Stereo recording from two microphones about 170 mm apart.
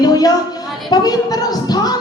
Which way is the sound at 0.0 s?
20° left (ahead or behind).